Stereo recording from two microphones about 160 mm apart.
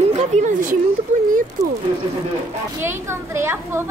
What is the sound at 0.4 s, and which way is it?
Speech, 55° right (ahead or behind).